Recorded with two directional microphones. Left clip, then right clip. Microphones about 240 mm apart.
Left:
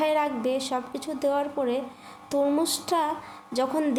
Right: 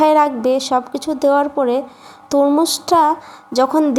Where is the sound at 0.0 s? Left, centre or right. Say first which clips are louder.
Right 12 dB; right.